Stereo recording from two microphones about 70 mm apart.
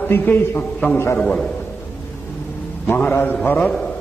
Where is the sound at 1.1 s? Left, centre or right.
Centre.